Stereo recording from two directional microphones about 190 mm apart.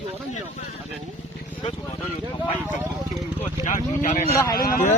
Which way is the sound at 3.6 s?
40° left (ahead or behind).